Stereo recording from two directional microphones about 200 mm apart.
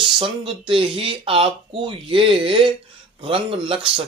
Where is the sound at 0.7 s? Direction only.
25° right (ahead or behind).